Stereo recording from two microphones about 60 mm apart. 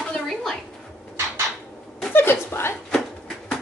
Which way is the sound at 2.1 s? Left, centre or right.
Left.